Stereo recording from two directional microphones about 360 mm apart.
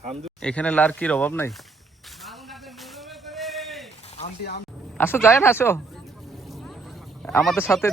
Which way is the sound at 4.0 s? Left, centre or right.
Centre.